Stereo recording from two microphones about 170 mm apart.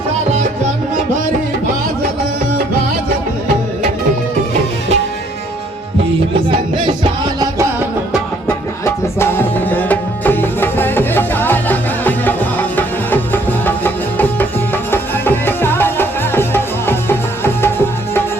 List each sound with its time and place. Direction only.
6.8 s music: 30° right (ahead or behind)
8.4 s music: 15° left (ahead or behind)